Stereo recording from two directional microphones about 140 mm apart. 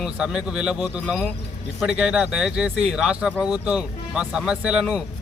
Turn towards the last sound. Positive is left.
turn(degrees=-5)  # may be behind; listen again after turning